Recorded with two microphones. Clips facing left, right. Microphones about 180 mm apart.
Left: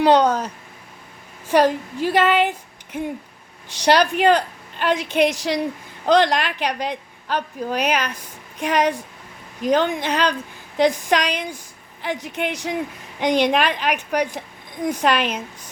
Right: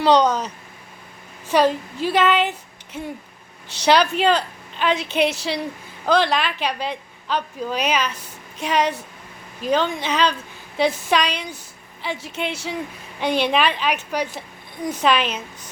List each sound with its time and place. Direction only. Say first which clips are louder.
0.0 s a woman's voice: left 1 dB; 10° left (ahead or behind)